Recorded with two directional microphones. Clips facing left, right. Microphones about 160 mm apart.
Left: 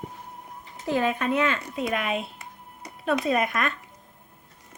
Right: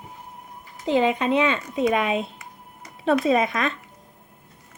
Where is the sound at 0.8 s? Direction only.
20° right (ahead or behind).